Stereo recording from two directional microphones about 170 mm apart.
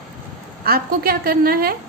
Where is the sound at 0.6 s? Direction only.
60° right (ahead or behind).